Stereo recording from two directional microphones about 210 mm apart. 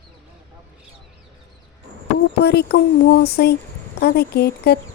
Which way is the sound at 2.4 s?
50° left (ahead or behind).